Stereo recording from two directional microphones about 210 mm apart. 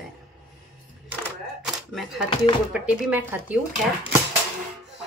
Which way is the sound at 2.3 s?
25° left (ahead or behind).